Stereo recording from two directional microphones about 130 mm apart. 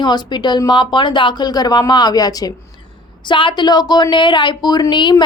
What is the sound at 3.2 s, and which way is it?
A woman's voice, 40° left (ahead or behind).